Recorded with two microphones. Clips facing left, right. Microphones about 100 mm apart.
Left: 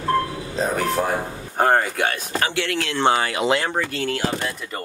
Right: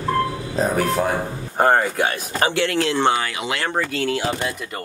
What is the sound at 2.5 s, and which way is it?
Speech, 30° right (ahead or behind).